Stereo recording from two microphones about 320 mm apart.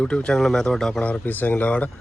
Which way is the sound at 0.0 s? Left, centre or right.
Centre.